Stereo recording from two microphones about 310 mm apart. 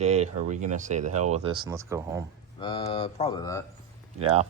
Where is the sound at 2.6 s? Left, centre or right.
Centre.